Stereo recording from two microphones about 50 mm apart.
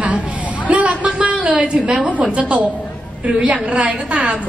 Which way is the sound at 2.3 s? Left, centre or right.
Right.